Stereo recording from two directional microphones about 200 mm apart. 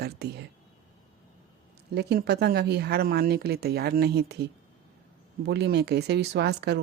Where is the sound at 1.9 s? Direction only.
55° right (ahead or behind).